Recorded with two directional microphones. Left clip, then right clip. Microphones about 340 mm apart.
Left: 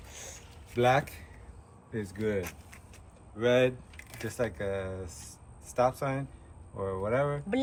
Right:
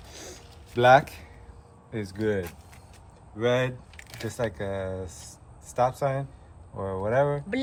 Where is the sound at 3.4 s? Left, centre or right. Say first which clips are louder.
Even; right.